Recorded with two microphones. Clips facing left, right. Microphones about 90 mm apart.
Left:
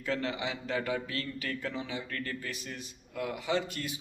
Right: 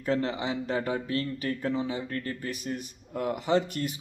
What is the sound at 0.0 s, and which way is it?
A man's voice, 30° right (ahead or behind).